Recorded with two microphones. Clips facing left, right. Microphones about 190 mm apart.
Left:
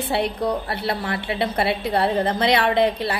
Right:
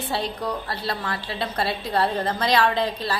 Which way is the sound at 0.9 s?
25° left (ahead or behind).